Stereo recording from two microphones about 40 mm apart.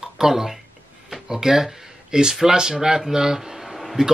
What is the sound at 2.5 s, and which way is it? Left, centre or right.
Speech, centre.